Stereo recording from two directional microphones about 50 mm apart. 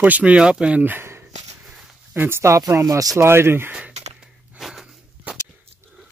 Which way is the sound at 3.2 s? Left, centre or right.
Right.